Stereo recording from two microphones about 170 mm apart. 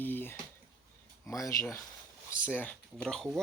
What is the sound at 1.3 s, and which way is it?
Speech, 20° left (ahead or behind).